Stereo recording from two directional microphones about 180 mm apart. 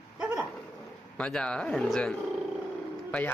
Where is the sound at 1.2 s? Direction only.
5° left (ahead or behind).